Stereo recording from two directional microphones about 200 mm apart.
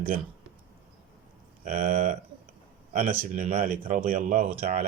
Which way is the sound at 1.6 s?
40° right (ahead or behind).